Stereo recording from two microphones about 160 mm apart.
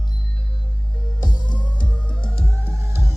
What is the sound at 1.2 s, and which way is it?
Music, 30° left (ahead or behind).